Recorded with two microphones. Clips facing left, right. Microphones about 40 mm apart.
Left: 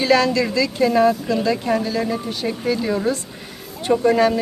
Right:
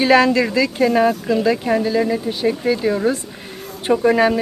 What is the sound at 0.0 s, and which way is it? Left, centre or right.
A woman's voice, right.